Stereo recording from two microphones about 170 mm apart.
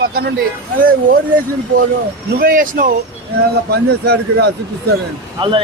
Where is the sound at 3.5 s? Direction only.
70° right (ahead or behind).